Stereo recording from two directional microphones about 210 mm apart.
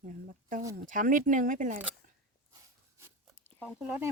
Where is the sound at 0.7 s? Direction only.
40° right (ahead or behind).